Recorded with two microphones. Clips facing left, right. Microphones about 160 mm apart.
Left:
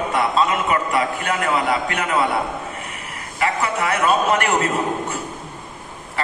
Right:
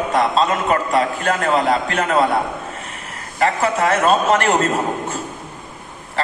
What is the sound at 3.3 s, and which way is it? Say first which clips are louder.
A man's voice: right 4 dB; 40° right (ahead or behind).